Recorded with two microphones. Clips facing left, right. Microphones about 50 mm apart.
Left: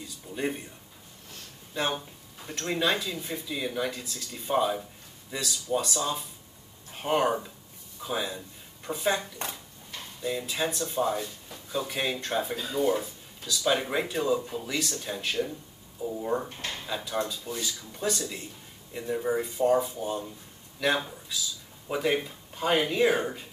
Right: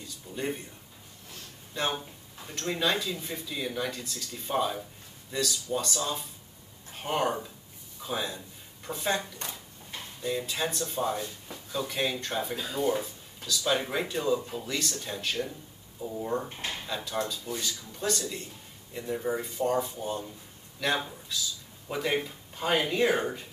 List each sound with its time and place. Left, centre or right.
0.4 s speech: centre
1.7 s speech: centre
10.2 s speech: centre
16.4 s speech: centre
16.8 s speech: centre